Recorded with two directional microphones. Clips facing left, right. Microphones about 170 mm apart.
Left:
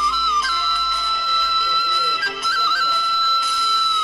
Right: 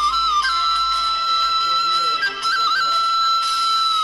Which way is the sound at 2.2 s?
50° left (ahead or behind).